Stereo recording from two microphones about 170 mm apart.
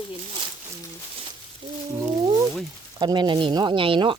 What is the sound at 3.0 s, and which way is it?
Speech, 25° right (ahead or behind).